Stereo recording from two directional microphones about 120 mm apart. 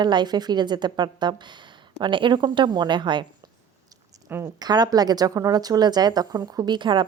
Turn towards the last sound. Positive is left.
turn(degrees=-40)  # may be behind; listen again after turning